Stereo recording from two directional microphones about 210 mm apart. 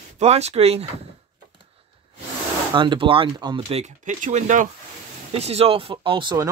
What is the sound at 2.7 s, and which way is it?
Speech, 20° right (ahead or behind).